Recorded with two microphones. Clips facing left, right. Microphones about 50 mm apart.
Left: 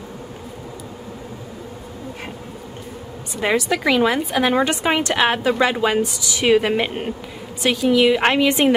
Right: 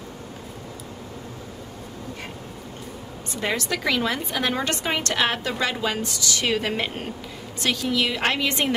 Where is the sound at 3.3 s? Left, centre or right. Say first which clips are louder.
Left 7 dB; centre.